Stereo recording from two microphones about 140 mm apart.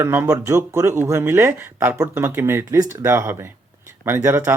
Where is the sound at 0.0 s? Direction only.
15° right (ahead or behind).